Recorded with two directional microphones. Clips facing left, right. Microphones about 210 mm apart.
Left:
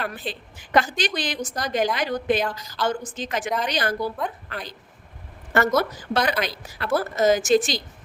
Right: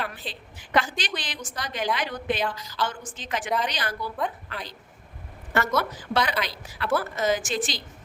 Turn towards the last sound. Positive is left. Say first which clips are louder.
# left 9 dB
turn(degrees=45)  # may be behind; listen again after turning